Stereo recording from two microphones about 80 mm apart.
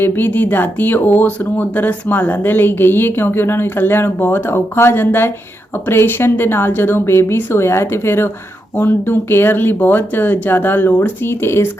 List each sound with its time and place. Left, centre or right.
0.0 s speech: left